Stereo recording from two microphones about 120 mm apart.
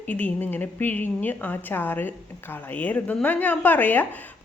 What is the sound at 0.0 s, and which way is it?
A woman's voice, 15° left (ahead or behind).